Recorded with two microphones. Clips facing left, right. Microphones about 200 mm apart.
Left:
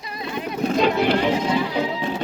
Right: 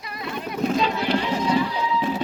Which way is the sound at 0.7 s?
60° left (ahead or behind).